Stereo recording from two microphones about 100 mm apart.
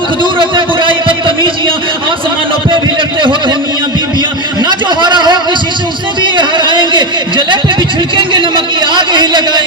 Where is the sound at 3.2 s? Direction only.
55° right (ahead or behind).